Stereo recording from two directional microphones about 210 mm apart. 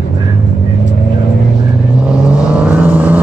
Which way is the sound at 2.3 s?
5° right (ahead or behind).